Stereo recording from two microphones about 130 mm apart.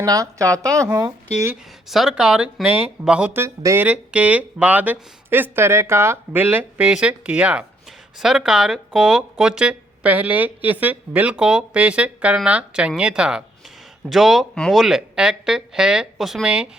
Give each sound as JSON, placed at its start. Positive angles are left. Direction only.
{"t": 0.0, "sound": "speech", "side_deg": -25}
{"t": 1.9, "sound": "speech", "side_deg": -5}
{"t": 3.8, "sound": "speech", "side_deg": -10}